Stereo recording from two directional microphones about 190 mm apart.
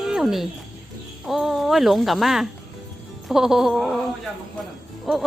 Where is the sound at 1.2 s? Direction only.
Centre (ahead or behind).